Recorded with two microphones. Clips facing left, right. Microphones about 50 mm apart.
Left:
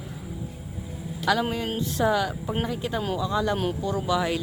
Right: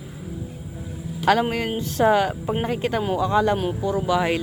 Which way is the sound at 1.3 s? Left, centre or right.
Right.